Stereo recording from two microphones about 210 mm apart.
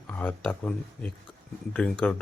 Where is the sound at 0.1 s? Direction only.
5° left (ahead or behind).